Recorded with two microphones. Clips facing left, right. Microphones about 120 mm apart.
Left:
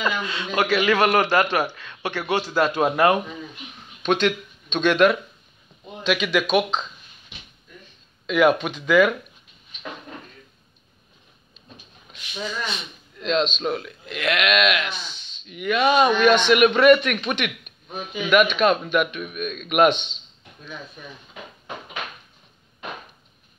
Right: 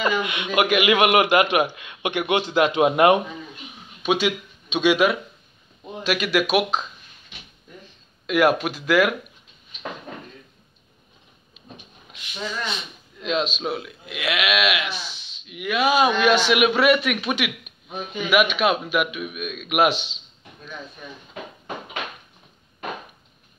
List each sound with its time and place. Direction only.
0.2 s a man's voice: 15° right (ahead or behind)
4.0 s a man's voice: 5° right (ahead or behind)
8.3 s speech: 5° right (ahead or behind)
13.2 s speech: 5° right (ahead or behind)